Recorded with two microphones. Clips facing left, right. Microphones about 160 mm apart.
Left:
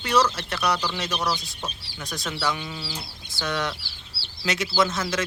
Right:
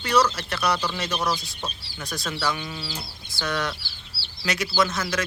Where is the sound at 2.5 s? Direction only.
10° left (ahead or behind).